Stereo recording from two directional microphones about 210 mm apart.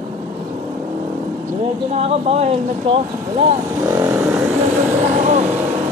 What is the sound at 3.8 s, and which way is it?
Vehicle, 15° right (ahead or behind).